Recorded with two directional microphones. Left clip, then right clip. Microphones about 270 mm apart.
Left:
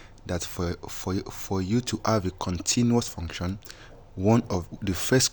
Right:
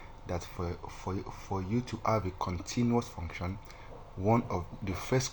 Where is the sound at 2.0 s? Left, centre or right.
Left.